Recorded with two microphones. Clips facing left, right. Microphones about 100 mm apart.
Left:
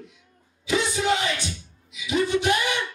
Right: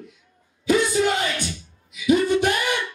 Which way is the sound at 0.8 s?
50° right (ahead or behind).